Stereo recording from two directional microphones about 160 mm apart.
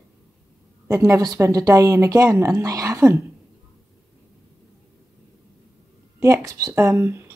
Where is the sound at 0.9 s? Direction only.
20° right (ahead or behind).